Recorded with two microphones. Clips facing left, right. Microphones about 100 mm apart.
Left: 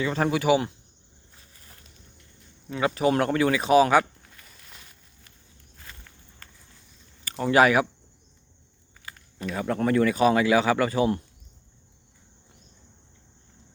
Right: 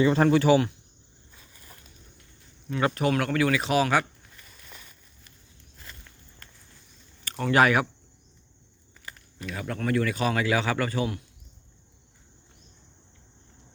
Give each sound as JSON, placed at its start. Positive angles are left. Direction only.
{"t": 0.0, "sound": "speech", "side_deg": 0}
{"t": 2.6, "sound": "speech", "side_deg": 10}
{"t": 3.1, "sound": "a man's voice", "side_deg": 25}
{"t": 7.3, "sound": "speech", "side_deg": 15}
{"t": 9.4, "sound": "a man's voice", "side_deg": 25}